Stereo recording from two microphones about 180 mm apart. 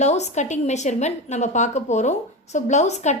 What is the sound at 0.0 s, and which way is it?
A woman's voice, 40° left (ahead or behind).